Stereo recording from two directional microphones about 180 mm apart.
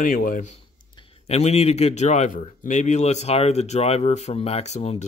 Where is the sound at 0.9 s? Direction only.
30° left (ahead or behind).